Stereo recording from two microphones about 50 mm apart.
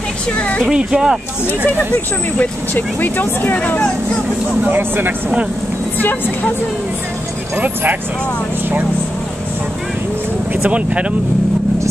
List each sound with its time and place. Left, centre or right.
0.7 s speech: centre
2.7 s speech: left
4.6 s speech: right
7.5 s speech: right
10.5 s speech: right